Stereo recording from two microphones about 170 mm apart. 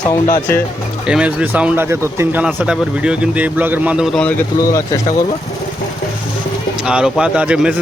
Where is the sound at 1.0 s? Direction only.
5° right (ahead or behind).